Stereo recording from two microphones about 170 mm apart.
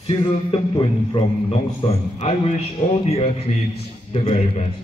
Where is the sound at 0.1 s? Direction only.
30° left (ahead or behind).